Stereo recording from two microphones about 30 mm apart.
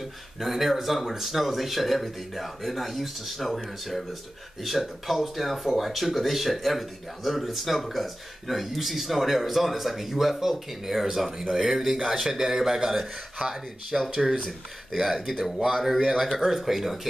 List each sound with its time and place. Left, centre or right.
0.0 s a man's voice: centre
13.4 s speech: right
14.1 s a man's voice: centre